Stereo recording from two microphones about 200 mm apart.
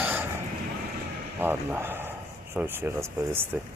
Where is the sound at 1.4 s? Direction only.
10° right (ahead or behind).